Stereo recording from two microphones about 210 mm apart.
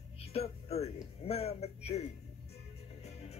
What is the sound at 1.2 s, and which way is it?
Speech, 30° left (ahead or behind).